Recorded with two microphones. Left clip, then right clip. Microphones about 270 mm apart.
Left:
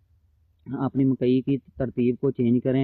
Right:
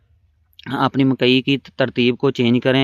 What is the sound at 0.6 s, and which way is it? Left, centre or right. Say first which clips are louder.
Speech: right 8 dB; centre.